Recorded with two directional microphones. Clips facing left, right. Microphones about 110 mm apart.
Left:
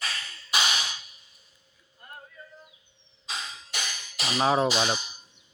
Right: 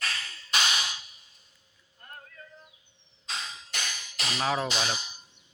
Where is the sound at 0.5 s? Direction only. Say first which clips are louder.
Left 1 dB; 5° left (ahead or behind).